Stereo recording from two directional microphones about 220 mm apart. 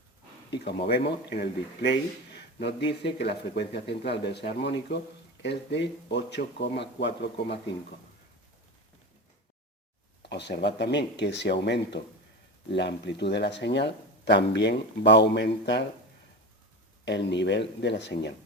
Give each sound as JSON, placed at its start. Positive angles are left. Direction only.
{"t": 0.5, "sound": "speech", "side_deg": 45}
{"t": 10.2, "sound": "speech", "side_deg": 50}
{"t": 17.1, "sound": "speech", "side_deg": 50}